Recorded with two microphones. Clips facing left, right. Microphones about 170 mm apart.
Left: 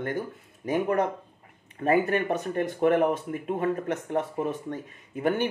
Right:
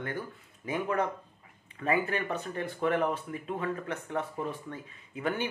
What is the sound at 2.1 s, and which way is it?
Speech, 50° left (ahead or behind).